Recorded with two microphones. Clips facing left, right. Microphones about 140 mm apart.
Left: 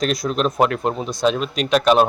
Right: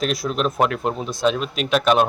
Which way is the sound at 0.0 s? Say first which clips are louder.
Left 2 dB; 5° right (ahead or behind).